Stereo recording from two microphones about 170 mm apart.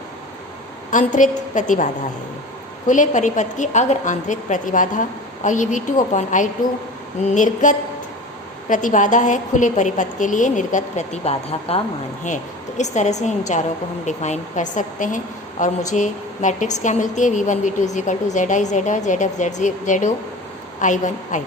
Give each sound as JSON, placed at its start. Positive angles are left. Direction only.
{"t": 0.9, "sound": "a woman's voice", "side_deg": 50}